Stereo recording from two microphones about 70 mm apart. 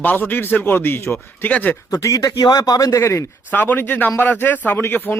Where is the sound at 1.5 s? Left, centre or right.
Left.